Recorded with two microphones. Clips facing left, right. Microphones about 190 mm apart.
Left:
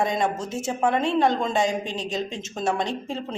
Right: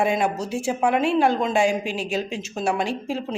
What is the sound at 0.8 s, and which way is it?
Speech, 5° right (ahead or behind).